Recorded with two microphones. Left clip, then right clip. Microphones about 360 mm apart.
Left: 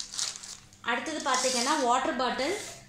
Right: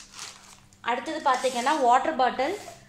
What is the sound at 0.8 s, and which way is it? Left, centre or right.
A woman's voice, right.